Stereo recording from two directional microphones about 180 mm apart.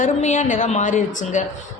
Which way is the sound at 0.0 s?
40° left (ahead or behind).